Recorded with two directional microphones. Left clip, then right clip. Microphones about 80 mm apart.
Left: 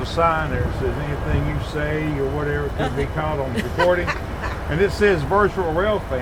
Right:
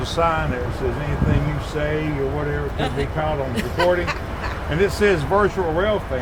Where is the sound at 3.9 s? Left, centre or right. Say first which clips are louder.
Left 1 dB; right.